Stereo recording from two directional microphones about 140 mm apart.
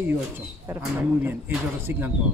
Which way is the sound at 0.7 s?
10° right (ahead or behind).